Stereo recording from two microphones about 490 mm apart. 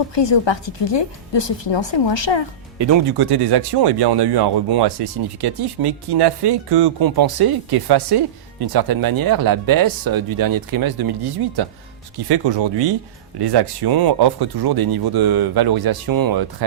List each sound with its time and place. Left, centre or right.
0.1 s a woman's voice: left
2.7 s speech: right